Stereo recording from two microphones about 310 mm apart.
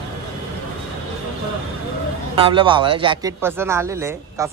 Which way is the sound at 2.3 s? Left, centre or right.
Centre.